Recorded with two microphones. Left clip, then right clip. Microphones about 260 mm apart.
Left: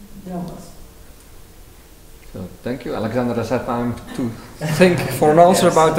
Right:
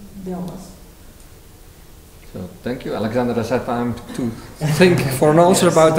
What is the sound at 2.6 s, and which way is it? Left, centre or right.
A man's voice, centre.